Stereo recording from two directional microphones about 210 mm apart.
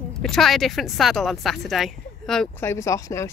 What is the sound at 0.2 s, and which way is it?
A woman's voice, centre (ahead or behind).